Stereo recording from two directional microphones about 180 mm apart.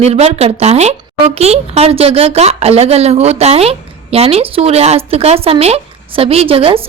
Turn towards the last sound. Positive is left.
turn(degrees=-30)  # may be behind; listen again after turning